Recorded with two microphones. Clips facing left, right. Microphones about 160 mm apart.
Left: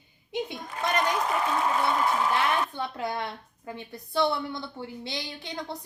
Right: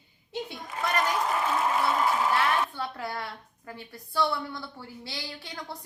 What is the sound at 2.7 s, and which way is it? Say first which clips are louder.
A woman's voice: left 3 dB; 20° left (ahead or behind).